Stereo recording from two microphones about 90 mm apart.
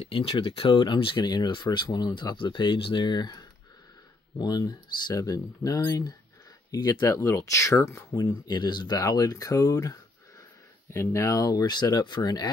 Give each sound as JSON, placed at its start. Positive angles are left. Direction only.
{"t": 0.0, "sound": "speech", "side_deg": 90}
{"t": 1.2, "sound": "speech", "side_deg": 55}
{"t": 2.3, "sound": "speech", "side_deg": 65}
{"t": 7.0, "sound": "speech", "side_deg": 30}
{"t": 8.2, "sound": "speech", "side_deg": 50}
{"t": 8.9, "sound": "speech", "side_deg": 40}